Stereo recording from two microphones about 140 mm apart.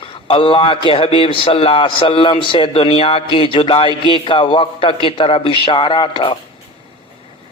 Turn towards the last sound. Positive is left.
turn(degrees=35)  # may be behind; listen again after turning